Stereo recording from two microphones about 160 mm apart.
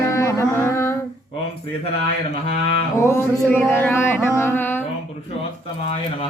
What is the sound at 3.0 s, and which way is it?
Speech, 15° left (ahead or behind).